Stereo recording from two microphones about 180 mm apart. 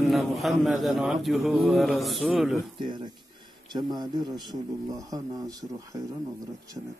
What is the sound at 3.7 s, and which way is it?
Speech, 25° right (ahead or behind).